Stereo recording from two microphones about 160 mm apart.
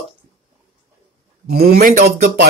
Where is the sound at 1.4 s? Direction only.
70° right (ahead or behind).